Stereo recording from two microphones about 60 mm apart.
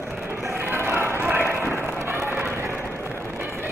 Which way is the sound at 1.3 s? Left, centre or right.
Right.